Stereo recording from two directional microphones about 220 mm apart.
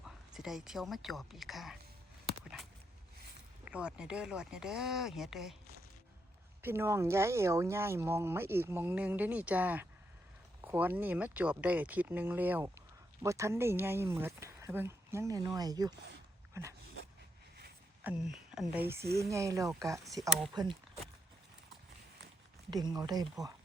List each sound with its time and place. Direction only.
0.0 s a woman's voice: centre (ahead or behind)
2.4 s a sound: centre (ahead or behind)
3.6 s speech: 5° right (ahead or behind)
6.6 s speech: 10° right (ahead or behind)
18.0 s speech: 5° right (ahead or behind)
22.7 s speech: 15° right (ahead or behind)